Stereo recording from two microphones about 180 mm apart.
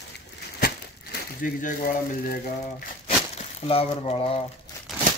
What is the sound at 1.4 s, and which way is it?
Speech, 50° left (ahead or behind).